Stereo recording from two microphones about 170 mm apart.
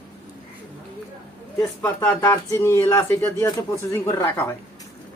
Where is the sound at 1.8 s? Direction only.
15° left (ahead or behind).